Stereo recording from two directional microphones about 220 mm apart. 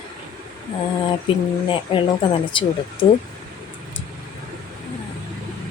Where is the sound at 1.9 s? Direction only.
25° left (ahead or behind).